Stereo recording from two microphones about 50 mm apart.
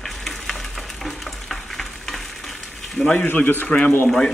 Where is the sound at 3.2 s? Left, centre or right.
Left.